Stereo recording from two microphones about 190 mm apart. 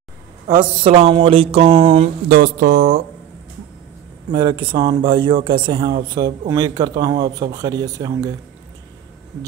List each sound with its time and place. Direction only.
0.8 s speech: 30° right (ahead or behind)
2.2 s a sound: 50° right (ahead or behind)
4.3 s speech: 25° right (ahead or behind)